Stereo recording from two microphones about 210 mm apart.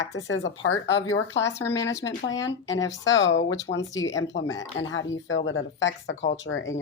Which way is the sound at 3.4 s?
20° left (ahead or behind).